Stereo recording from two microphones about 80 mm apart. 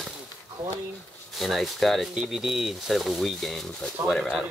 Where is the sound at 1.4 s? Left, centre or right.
Centre.